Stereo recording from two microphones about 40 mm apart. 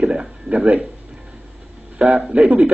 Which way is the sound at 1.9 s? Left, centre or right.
Right.